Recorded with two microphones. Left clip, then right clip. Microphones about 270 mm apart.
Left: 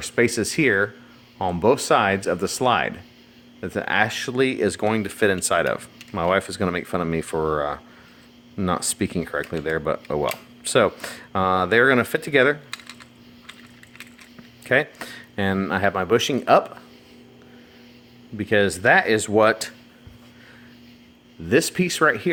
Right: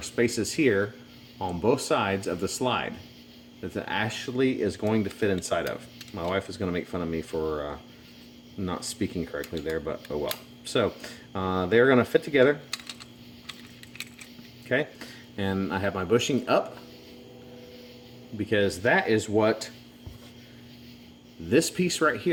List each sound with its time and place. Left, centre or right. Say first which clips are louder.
0.0 s speech: left 6 dB; left
14.7 s speech: left 7 dB; left
18.3 s speech: left 5 dB; left
21.5 s speech: left 4 dB; left